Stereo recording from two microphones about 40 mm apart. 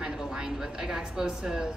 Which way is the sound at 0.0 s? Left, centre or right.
Centre.